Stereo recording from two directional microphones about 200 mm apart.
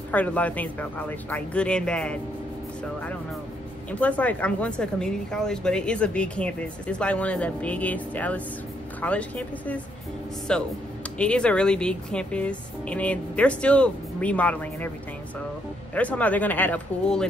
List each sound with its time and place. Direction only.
0.1 s speech: 5° left (ahead or behind)
4.0 s speech: 5° left (ahead or behind)
15.9 s speech: 5° left (ahead or behind)